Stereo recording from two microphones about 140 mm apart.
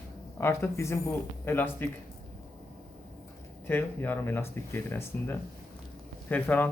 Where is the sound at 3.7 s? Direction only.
15° left (ahead or behind).